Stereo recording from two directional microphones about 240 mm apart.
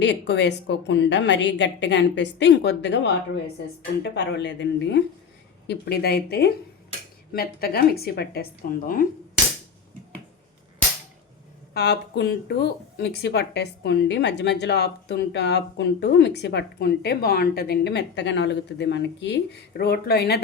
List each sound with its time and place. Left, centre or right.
0.0 s speech: left
11.7 s speech: left